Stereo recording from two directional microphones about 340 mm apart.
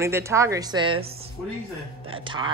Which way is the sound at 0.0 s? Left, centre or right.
Centre.